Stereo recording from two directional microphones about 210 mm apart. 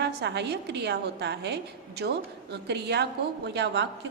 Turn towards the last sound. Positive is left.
turn(degrees=-55)  # may be behind; listen again after turning